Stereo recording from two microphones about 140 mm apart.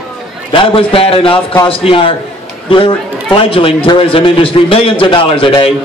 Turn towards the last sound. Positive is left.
turn(degrees=40)  # may be behind; listen again after turning